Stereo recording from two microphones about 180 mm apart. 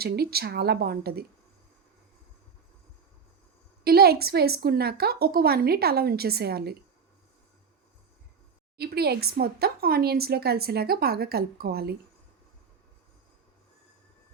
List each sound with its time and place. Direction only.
0.0 s speech: 60° right (ahead or behind)
3.8 s speech: 60° right (ahead or behind)
8.8 s speech: 60° right (ahead or behind)